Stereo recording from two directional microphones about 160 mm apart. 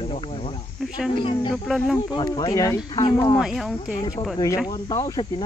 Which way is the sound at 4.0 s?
25° left (ahead or behind).